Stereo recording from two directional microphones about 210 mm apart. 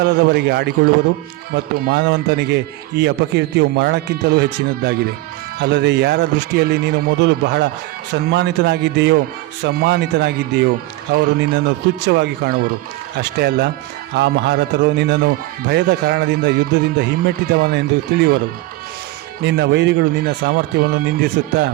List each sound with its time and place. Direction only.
0.0 s a man's voice: 50° right (ahead or behind)
1.9 s a man's voice: 50° right (ahead or behind)
19.5 s a man's voice: 55° right (ahead or behind)